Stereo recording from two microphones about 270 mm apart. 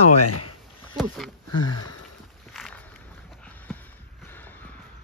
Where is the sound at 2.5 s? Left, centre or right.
Centre.